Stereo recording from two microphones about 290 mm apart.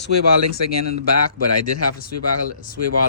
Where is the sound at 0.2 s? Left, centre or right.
Left.